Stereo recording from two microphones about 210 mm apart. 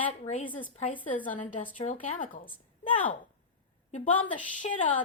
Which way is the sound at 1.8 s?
25° left (ahead or behind).